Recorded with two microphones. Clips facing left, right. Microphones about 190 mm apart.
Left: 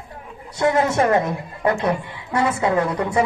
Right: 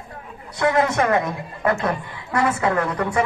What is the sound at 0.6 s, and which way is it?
A man's voice, 25° left (ahead or behind).